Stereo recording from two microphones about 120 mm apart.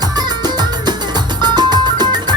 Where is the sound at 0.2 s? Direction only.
35° right (ahead or behind).